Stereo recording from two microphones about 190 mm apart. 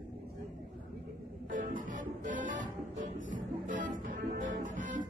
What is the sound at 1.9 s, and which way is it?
Music, 45° right (ahead or behind).